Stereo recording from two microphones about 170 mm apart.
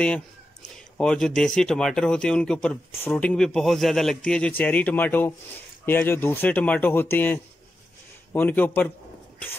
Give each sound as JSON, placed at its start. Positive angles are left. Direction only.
{"t": 0.9, "sound": "speech", "side_deg": 5}